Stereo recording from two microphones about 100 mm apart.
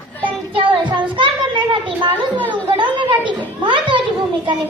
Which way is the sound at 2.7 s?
55° right (ahead or behind).